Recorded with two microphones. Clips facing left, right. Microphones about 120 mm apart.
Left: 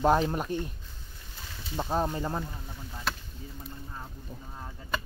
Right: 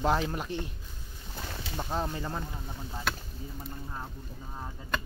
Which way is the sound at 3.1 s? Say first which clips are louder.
Even; centre (ahead or behind).